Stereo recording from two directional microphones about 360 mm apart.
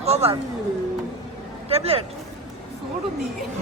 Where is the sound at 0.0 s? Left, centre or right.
Centre.